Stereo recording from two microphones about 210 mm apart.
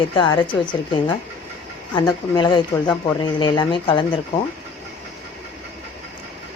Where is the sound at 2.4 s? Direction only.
20° left (ahead or behind).